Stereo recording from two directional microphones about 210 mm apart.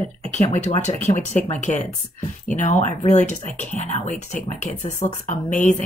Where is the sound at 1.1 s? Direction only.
35° left (ahead or behind).